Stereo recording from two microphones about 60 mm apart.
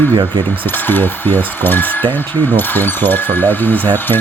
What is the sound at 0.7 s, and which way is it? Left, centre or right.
Speech, left.